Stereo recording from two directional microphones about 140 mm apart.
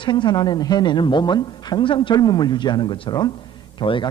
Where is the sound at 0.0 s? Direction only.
35° left (ahead or behind).